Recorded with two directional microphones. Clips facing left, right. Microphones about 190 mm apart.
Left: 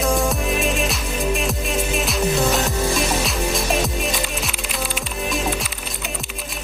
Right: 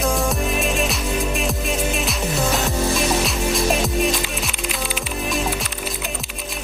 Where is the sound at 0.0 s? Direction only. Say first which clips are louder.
Left 1 dB; centre (ahead or behind).